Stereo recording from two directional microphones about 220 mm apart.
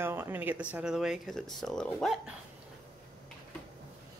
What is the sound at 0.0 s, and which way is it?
Speech, 10° right (ahead or behind).